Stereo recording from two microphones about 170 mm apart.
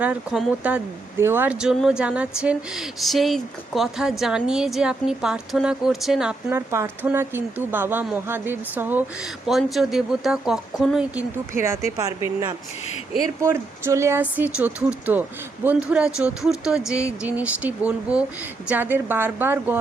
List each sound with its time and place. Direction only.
0.0 s speech: 5° right (ahead or behind)
6.5 s speech: 15° right (ahead or behind)
11.6 s speech: 15° right (ahead or behind)